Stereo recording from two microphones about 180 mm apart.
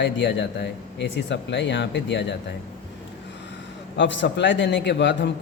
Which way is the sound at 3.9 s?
90° left.